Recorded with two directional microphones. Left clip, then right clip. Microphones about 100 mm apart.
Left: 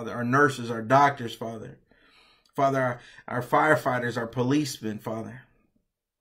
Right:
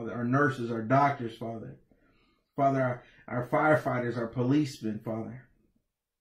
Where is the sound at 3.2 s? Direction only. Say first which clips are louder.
Left 4 dB; 15° left (ahead or behind).